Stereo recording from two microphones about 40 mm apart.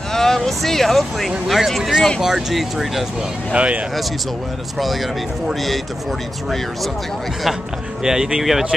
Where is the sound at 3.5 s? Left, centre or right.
Right.